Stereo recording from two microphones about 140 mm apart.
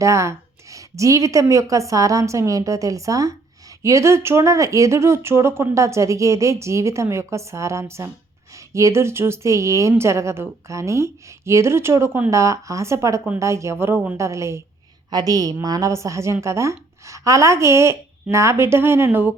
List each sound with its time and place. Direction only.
0.0 s speech: 20° right (ahead or behind)